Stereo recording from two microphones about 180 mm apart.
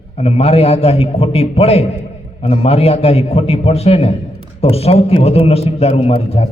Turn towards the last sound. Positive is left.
turn(degrees=35)  # may be behind; listen again after turning